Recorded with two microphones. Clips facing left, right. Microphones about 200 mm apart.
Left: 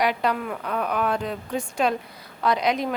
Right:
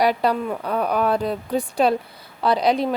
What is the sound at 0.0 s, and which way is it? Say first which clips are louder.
A woman's voice: right 4 dB; 35° right (ahead or behind).